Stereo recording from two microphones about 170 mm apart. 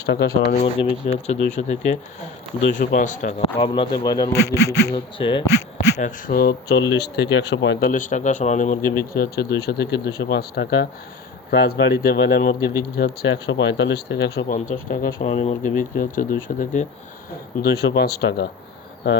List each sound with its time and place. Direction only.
0.1 s speech: 85° left
0.6 s speech: 35° left (ahead or behind)
3.6 s speech: 25° left (ahead or behind)
5.7 s speech: 50° left (ahead or behind); by 6.8 s 65° left (ahead or behind)
6.9 s speech: 85° left
7.9 s speech: 50° left (ahead or behind); by 10.7 s 75° left (ahead or behind)
11.5 s speech: 65° left (ahead or behind)
13.5 s speech: 90° left
14.5 s speech: 50° left (ahead or behind)
17.6 s speech: 70° left (ahead or behind)